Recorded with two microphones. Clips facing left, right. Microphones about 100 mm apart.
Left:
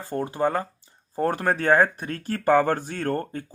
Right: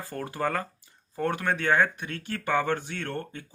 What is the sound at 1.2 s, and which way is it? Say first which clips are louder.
Speech: left 4 dB; 35° left (ahead or behind).